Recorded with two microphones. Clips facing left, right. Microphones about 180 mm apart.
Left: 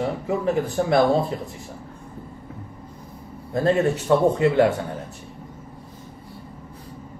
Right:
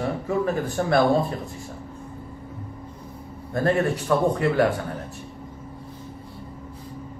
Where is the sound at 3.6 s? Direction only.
20° left (ahead or behind).